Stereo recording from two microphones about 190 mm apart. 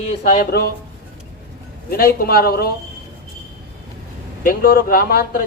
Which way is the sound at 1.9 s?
50° left (ahead or behind).